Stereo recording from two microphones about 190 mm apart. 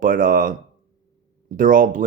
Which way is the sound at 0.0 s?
45° right (ahead or behind).